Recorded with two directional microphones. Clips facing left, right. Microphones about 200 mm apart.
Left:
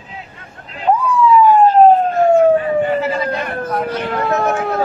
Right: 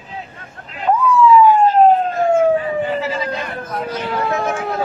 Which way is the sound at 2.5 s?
55° left (ahead or behind).